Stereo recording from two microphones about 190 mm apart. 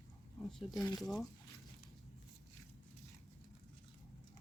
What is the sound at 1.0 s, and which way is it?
Speech, centre (ahead or behind).